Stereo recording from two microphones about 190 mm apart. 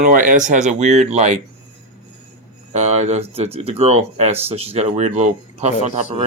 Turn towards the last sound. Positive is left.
turn(degrees=-35)  # may be behind; listen again after turning